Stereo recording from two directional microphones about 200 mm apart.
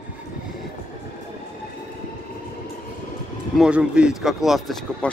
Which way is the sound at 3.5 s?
5° right (ahead or behind).